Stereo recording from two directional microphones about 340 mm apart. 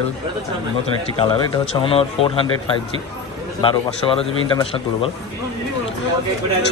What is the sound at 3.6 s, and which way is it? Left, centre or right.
Speech, centre.